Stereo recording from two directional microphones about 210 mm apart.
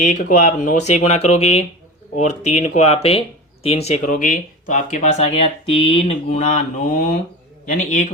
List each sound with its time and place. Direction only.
0.0 s speech: 35° left (ahead or behind)